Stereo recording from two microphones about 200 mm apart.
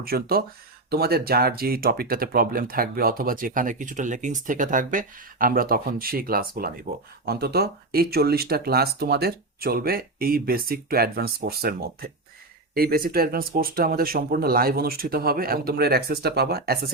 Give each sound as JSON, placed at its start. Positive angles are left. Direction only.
{"t": 0.0, "sound": "speech", "side_deg": -50}